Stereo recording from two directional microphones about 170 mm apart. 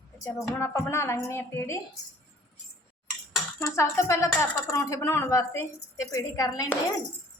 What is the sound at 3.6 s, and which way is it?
Speech, 15° left (ahead or behind).